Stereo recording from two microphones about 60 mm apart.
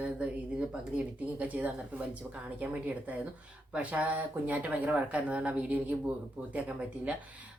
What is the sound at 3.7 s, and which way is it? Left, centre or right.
Speech, centre.